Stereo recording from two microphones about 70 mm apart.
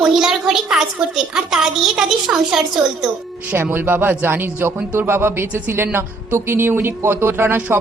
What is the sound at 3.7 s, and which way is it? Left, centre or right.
Speech, right.